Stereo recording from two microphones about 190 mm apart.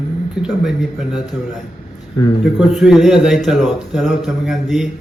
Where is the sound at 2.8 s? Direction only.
Centre (ahead or behind).